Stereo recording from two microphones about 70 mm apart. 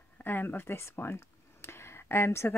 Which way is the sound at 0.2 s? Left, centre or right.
Left.